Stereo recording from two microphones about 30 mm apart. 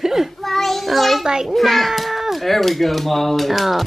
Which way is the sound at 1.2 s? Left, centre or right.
Right.